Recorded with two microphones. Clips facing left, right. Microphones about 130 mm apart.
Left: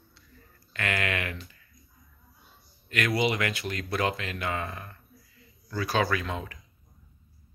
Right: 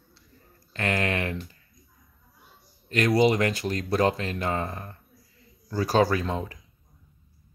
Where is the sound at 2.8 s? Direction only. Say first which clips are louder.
Right 6 dB; 35° right (ahead or behind).